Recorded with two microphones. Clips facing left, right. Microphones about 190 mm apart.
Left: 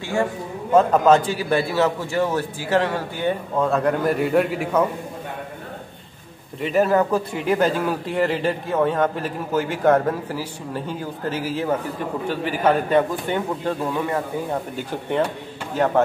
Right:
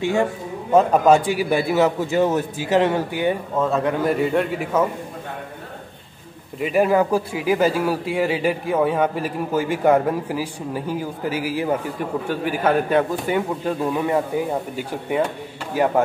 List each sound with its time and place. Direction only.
0.0 s a man's voice: 20° right (ahead or behind)
3.5 s a man's voice: centre (ahead or behind)
6.6 s speech: 10° right (ahead or behind)